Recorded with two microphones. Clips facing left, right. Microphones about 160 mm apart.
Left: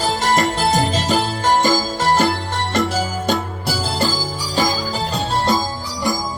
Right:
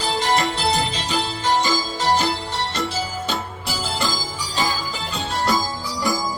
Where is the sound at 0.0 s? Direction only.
45° left (ahead or behind).